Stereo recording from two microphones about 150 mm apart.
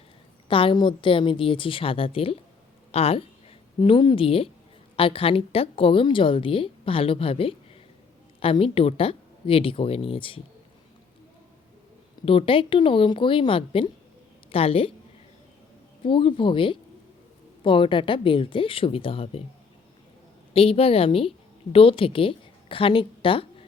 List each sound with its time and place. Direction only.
0.4 s a woman's voice: 35° left (ahead or behind)
12.2 s a woman's voice: 35° left (ahead or behind)
16.0 s a woman's voice: 35° left (ahead or behind)
20.5 s a woman's voice: 40° left (ahead or behind)